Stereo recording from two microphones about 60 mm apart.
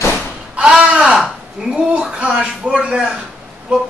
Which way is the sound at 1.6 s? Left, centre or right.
Centre.